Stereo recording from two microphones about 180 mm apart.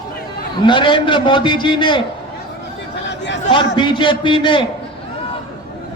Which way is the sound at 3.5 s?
25° left (ahead or behind).